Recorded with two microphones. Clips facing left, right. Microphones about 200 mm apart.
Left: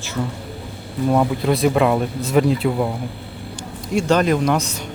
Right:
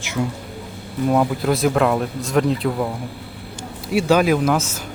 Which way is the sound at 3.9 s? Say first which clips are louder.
Right 1 dB; 5° right (ahead or behind).